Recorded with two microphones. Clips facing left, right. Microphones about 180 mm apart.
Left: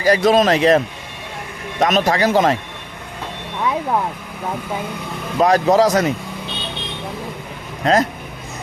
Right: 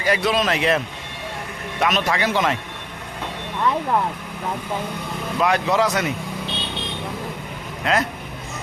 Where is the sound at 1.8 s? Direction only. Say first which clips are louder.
Left 5 dB; 40° left (ahead or behind).